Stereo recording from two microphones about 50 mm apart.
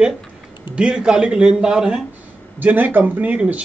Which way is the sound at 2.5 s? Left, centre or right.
Right.